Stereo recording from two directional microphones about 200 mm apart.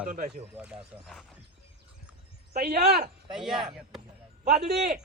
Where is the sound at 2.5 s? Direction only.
50° right (ahead or behind).